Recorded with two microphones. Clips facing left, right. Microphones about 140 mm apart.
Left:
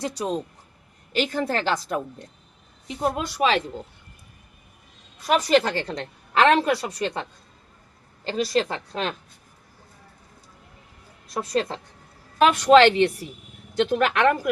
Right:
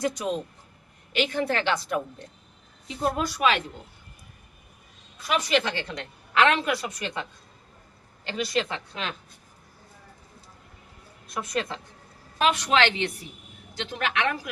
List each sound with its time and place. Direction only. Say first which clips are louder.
0.0 s a woman's voice: even; 35° left (ahead or behind)
2.8 s speech: left 1 dB; 20° left (ahead or behind)
5.2 s a woman's voice: left 5 dB; 40° left (ahead or behind)
11.3 s a woman's voice: left 5 dB; 35° left (ahead or behind)
12.4 s speech: left 8 dB; 50° left (ahead or behind)